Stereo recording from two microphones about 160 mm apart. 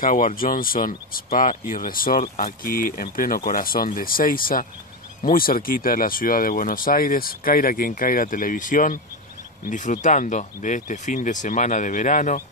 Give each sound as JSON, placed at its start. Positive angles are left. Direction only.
{"t": 0.0, "sound": "speech", "side_deg": 55}